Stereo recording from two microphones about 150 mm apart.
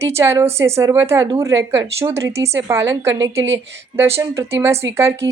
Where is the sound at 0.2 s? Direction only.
15° right (ahead or behind).